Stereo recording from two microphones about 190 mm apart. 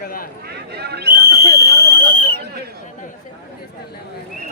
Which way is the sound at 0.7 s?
60° right (ahead or behind).